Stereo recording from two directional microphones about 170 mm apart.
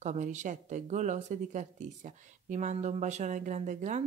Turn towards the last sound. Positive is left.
turn(degrees=-45)  # may be behind; listen again after turning